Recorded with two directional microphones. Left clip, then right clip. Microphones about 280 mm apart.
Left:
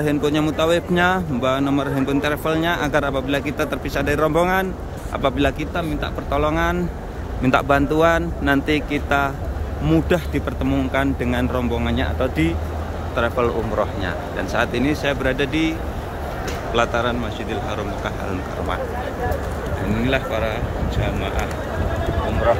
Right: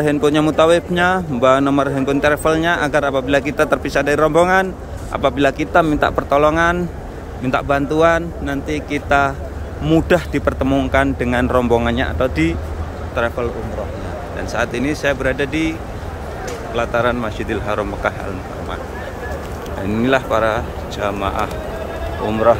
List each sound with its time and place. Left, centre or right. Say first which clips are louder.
0.0 s speech: right 5 dB; centre
14.5 s speech: right 1 dB; centre
16.7 s speech: right 2 dB; centre
20.0 s speech: right 7 dB; centre